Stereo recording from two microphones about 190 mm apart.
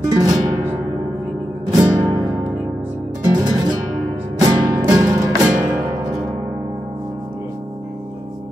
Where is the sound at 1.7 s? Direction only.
20° right (ahead or behind).